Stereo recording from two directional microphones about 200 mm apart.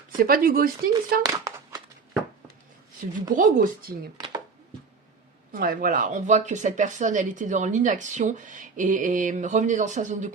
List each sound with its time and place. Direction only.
0.2 s speech: 45° right (ahead or behind)
1.2 s speech: 15° right (ahead or behind)
3.1 s speech: 40° right (ahead or behind)
5.5 s speech: 45° right (ahead or behind)